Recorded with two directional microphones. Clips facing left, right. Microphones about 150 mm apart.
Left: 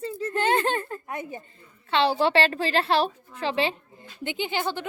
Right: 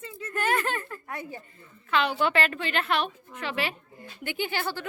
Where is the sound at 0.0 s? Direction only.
35° left (ahead or behind).